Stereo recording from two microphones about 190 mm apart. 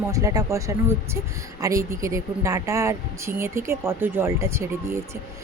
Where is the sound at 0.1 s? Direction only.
15° right (ahead or behind).